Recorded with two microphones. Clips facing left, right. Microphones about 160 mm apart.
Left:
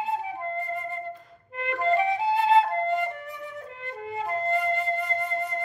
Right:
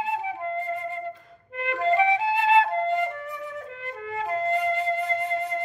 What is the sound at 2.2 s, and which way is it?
Flute, 40° left (ahead or behind).